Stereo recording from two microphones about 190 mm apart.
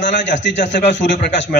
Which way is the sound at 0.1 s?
70° left (ahead or behind).